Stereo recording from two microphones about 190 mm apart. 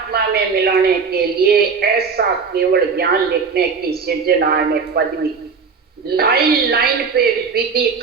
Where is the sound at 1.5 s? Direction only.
55° right (ahead or behind).